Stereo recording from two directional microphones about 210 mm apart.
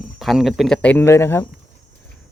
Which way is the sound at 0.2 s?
Centre (ahead or behind).